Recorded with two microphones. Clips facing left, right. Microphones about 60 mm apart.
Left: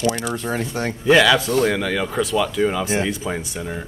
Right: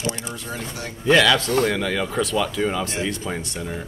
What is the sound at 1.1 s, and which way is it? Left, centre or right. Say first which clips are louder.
Speech: left 2 dB; centre.